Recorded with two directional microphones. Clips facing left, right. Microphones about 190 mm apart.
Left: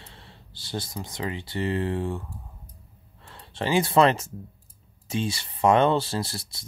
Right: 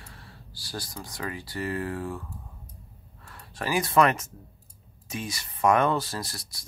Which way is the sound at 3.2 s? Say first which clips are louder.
Left 3 dB; 25° left (ahead or behind).